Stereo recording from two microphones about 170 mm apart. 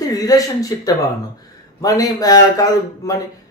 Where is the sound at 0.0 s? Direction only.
20° left (ahead or behind).